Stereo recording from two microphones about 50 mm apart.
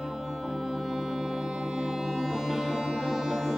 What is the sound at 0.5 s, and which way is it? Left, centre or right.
Music, centre.